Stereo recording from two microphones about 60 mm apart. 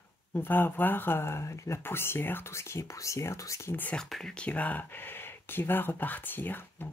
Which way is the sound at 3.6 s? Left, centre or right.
Left.